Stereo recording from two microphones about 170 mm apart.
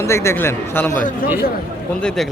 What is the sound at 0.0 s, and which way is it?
A man's voice, 15° left (ahead or behind).